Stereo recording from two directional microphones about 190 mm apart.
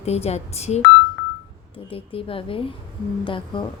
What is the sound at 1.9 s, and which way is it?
A woman's voice, 30° left (ahead or behind).